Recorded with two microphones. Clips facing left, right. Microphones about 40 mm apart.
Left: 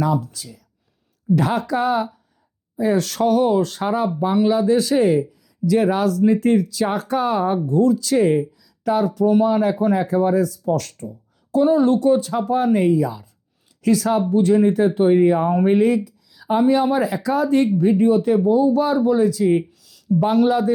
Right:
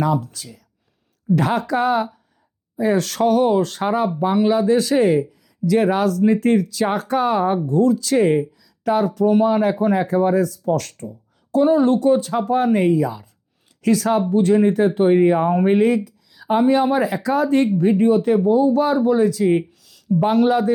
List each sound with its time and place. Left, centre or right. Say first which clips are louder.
0.0 s speech: right 1 dB; right